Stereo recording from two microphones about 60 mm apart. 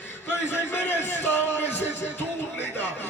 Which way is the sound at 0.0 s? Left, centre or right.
Left.